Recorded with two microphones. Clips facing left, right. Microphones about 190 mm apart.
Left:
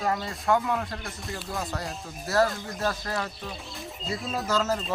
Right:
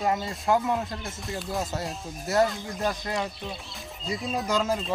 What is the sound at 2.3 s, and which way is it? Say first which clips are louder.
Speech: right 1 dB; 20° right (ahead or behind).